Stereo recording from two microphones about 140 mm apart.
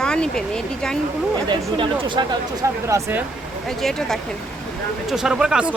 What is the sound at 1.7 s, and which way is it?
Speech, 35° right (ahead or behind).